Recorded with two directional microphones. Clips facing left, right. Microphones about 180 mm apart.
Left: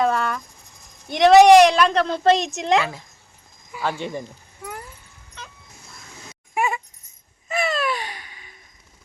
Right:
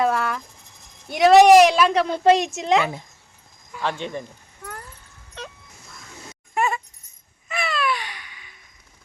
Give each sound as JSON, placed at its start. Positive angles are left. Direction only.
{"t": 0.0, "sound": "cricket", "side_deg": -5}
{"t": 1.1, "sound": "speech", "side_deg": -5}
{"t": 3.7, "sound": "a sound", "side_deg": 5}
{"t": 5.4, "sound": "music", "side_deg": -65}
{"t": 6.5, "sound": "a sound", "side_deg": 10}
{"t": 7.4, "sound": "babbling", "side_deg": 40}